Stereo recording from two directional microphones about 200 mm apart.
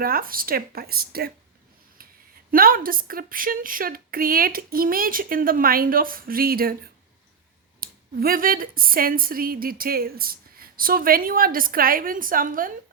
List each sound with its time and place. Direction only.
0.0 s speech: 45° right (ahead or behind)
2.5 s speech: 45° right (ahead or behind)
7.8 s speech: 45° right (ahead or behind)